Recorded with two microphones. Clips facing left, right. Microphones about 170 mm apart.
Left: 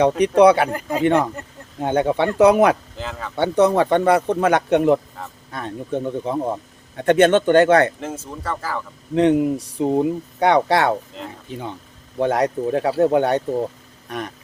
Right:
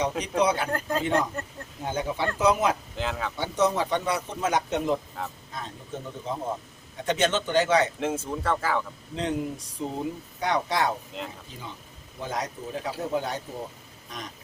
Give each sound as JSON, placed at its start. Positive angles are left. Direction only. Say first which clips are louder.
{"t": 0.2, "sound": "speech", "louder": "left 13 dB", "side_deg": 65}
{"t": 3.0, "sound": "speech", "louder": "even", "side_deg": 0}
{"t": 3.3, "sound": "speech", "louder": "left 10 dB", "side_deg": 60}
{"t": 7.9, "sound": "speech", "louder": "right 2 dB", "side_deg": 0}
{"t": 9.1, "sound": "speech", "louder": "left 13 dB", "side_deg": 65}
{"t": 12.1, "sound": "speech", "louder": "left 13 dB", "side_deg": 65}